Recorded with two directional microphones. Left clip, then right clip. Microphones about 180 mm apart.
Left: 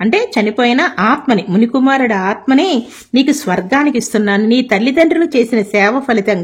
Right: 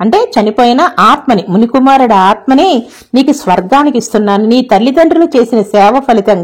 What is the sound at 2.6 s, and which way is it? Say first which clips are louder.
Speech: right 6 dB; centre (ahead or behind).